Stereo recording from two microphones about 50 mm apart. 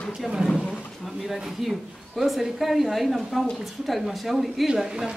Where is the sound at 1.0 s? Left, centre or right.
Centre.